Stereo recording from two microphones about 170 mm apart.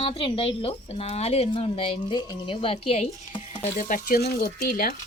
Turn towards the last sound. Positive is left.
turn(degrees=60)  # may be behind; listen again after turning